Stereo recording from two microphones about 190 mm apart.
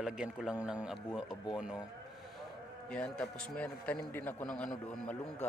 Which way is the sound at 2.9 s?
5° left (ahead or behind).